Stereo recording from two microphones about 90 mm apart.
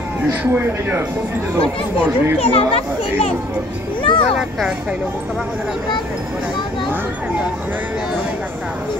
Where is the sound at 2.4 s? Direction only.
90° left.